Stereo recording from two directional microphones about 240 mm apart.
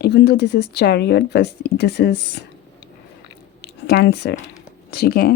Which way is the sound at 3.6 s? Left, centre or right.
Left.